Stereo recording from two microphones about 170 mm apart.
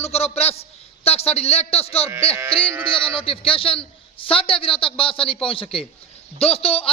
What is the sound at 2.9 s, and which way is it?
A man's voice, 30° left (ahead or behind).